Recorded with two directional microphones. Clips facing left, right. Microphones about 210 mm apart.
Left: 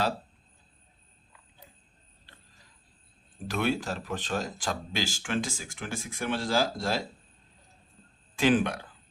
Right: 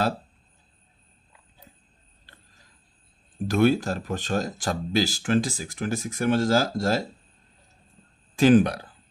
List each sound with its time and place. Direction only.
3.4 s speech: 40° right (ahead or behind)
8.4 s speech: 40° right (ahead or behind)